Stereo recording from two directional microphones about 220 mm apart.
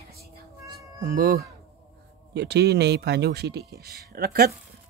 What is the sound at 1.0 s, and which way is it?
Speech, 40° right (ahead or behind).